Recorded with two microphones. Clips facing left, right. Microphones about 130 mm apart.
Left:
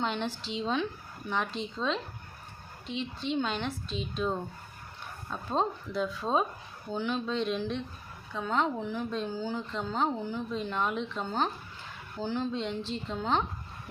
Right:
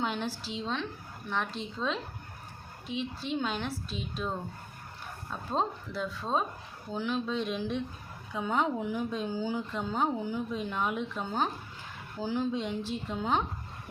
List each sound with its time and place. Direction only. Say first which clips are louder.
0.0 s a woman's voice: left 1 dB; 5° right (ahead or behind)